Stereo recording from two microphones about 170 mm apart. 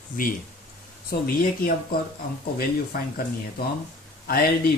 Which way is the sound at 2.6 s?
60° left (ahead or behind).